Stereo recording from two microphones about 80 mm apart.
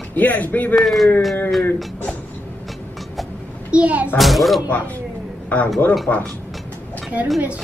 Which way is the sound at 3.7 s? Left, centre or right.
Centre.